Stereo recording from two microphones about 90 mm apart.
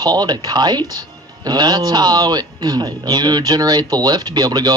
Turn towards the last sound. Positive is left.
turn(degrees=-50)  # may be behind; listen again after turning